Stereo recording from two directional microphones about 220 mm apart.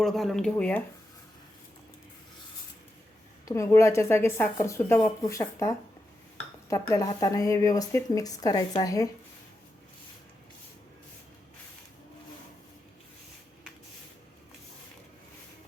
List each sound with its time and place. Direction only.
0.0 s speech: centre (ahead or behind)
3.4 s speech: 15° left (ahead or behind)